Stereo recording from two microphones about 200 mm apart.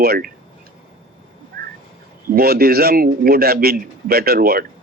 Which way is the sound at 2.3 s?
50° right (ahead or behind).